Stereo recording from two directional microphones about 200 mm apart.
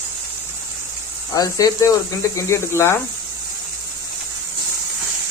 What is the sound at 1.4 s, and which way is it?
Speech, 20° left (ahead or behind).